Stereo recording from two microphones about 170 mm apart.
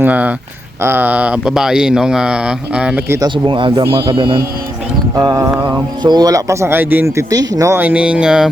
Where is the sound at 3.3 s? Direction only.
30° right (ahead or behind).